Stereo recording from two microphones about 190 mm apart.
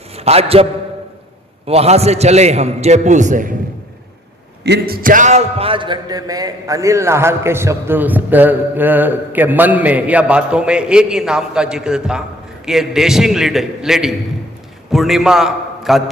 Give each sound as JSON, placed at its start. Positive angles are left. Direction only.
{"t": 0.2, "sound": "a man's voice", "side_deg": -30}
{"t": 4.6, "sound": "a man's voice", "side_deg": -55}